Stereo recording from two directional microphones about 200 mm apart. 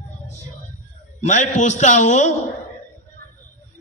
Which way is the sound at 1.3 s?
35° left (ahead or behind).